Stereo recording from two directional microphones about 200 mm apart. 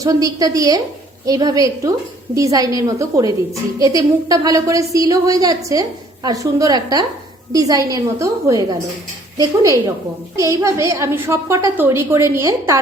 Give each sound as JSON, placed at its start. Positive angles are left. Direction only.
{"t": 0.0, "sound": "a woman's voice", "side_deg": -15}
{"t": 10.3, "sound": "a woman's voice", "side_deg": -15}